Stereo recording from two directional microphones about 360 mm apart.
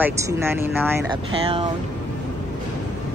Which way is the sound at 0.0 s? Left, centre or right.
Centre.